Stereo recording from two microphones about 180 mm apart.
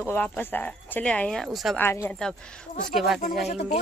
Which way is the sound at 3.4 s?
35° left (ahead or behind).